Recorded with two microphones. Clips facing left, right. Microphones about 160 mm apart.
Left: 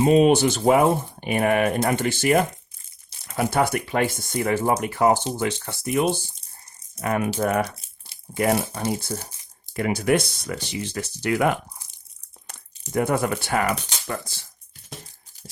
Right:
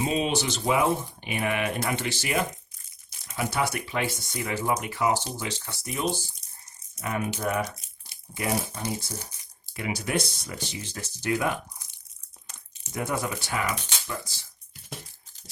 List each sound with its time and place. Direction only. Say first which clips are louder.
0.0 s speech: left 10 dB; 55° left (ahead or behind)
12.9 s speech: left 8 dB; 55° left (ahead or behind)